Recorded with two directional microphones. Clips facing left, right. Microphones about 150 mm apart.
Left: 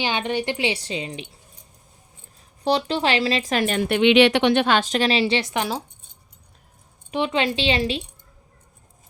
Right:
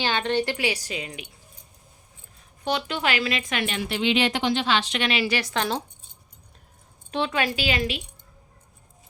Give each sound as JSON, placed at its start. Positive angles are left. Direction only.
{"t": 0.0, "sound": "speech", "side_deg": 15}
{"t": 2.6, "sound": "speech", "side_deg": 35}
{"t": 7.1, "sound": "speech", "side_deg": 20}